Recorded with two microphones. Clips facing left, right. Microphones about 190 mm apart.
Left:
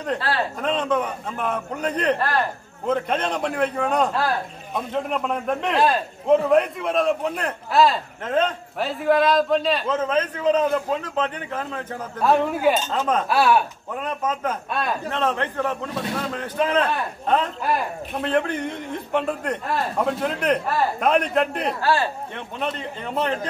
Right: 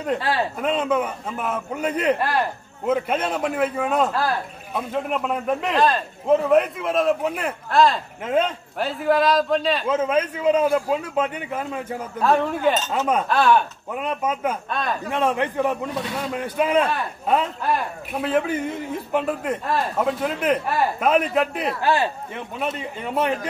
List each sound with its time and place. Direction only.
0.0 s a man's voice: 10° right (ahead or behind)
8.3 s a man's voice: 10° right (ahead or behind)
12.2 s speech: 5° left (ahead or behind)
12.9 s a man's voice: 10° right (ahead or behind)
13.3 s speech: 10° left (ahead or behind)
13.9 s a man's voice: 10° right (ahead or behind)
14.7 s speech: 5° left (ahead or behind)
15.0 s a man's voice: 15° right (ahead or behind)
21.8 s speech: 20° right (ahead or behind)
22.3 s a man's voice: 5° right (ahead or behind)